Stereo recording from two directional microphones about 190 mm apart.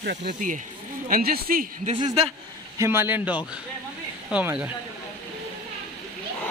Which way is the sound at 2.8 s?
10° right (ahead or behind).